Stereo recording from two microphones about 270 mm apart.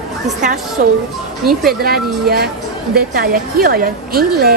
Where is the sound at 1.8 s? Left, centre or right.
Right.